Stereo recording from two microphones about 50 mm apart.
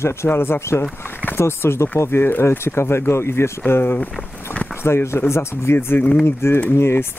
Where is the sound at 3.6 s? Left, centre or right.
Left.